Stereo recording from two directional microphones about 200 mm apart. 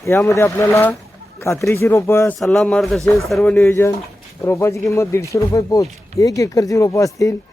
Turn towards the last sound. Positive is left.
turn(degrees=15)  # may be behind; listen again after turning